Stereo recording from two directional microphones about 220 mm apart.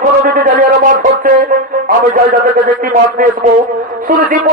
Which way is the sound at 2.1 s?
40° right (ahead or behind).